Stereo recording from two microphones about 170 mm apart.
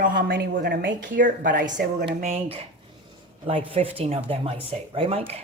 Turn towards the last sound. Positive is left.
turn(degrees=-35)  # may be behind; listen again after turning